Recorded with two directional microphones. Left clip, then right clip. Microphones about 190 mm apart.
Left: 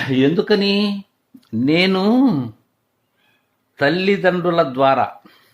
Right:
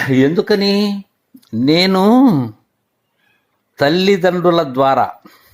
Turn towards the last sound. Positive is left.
turn(degrees=-20)  # may be behind; listen again after turning